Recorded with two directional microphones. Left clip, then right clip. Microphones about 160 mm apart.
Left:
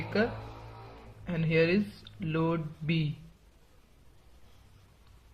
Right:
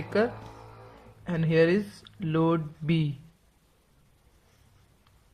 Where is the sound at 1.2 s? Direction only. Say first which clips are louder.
Right 4 dB; 60° right (ahead or behind).